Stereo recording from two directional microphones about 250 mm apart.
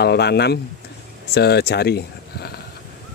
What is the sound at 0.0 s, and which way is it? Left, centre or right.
Speech, left.